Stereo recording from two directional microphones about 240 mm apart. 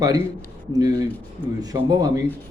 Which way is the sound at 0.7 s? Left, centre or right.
Centre.